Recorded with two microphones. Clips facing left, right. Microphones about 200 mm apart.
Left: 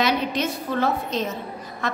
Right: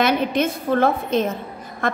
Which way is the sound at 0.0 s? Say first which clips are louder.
Right 4 dB; 55° right (ahead or behind).